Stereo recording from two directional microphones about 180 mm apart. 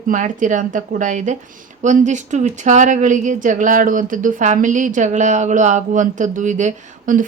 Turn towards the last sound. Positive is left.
turn(degrees=-45)  # may be behind; listen again after turning